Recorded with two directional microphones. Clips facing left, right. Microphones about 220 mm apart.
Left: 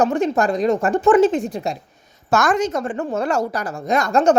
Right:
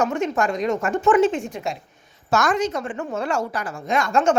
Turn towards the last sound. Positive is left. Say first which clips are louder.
# left 4 dB
turn(degrees=40)  # may be behind; listen again after turning